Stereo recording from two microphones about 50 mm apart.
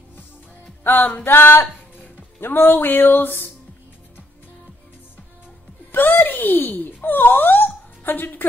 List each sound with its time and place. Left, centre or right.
0.8 s music: left
2.4 s speech: left
5.9 s speech: left